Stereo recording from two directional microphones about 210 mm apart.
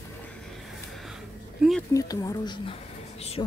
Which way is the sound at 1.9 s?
15° left (ahead or behind).